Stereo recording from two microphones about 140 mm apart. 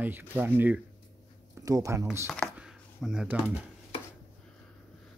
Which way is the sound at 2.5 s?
5° right (ahead or behind).